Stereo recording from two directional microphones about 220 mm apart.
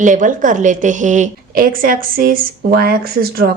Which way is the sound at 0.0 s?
35° right (ahead or behind).